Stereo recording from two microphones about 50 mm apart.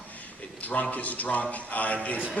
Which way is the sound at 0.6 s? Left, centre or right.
Left.